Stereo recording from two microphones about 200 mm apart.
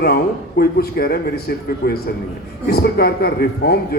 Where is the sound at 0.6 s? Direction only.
50° left (ahead or behind).